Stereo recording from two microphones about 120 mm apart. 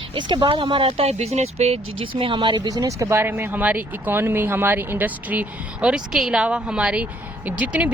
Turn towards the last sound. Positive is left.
turn(degrees=-10)  # may be behind; listen again after turning